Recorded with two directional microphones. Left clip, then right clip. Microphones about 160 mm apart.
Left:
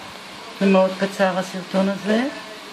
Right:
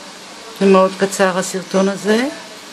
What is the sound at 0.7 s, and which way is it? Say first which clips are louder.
Speech: right 6 dB; 60° right (ahead or behind).